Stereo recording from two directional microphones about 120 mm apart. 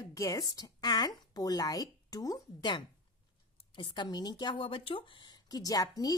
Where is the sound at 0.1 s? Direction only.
30° left (ahead or behind).